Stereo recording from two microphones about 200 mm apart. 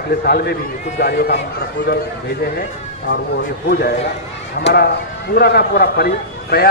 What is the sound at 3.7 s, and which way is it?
Speech, 55° left (ahead or behind).